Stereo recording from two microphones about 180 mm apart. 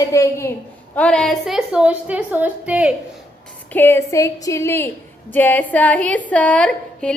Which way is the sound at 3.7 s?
15° left (ahead or behind).